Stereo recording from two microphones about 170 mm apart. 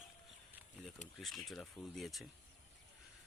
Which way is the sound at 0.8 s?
5° left (ahead or behind).